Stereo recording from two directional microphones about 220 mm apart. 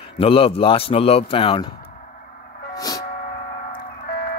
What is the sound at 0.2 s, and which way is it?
Speech, 25° left (ahead or behind).